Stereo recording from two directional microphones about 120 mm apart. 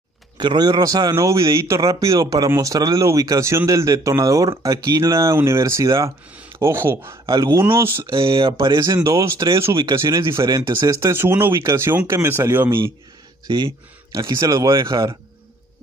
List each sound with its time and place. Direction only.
0.4 s a man's voice: 35° right (ahead or behind); by 8.0 s 20° right (ahead or behind)
8.1 s speech: 50° right (ahead or behind)
8.6 s a man's voice: 35° right (ahead or behind); by 12.9 s 20° right (ahead or behind)
13.5 s a man's voice: 40° right (ahead or behind)